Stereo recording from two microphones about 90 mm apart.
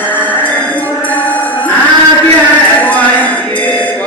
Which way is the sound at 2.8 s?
15° left (ahead or behind).